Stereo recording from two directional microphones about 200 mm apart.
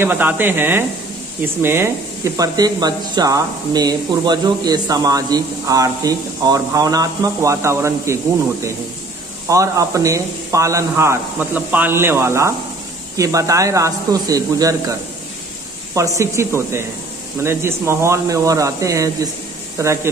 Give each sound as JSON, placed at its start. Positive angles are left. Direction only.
{"t": 0.0, "sound": "speech", "side_deg": -10}
{"t": 9.5, "sound": "speech", "side_deg": -15}
{"t": 16.2, "sound": "speech", "side_deg": -15}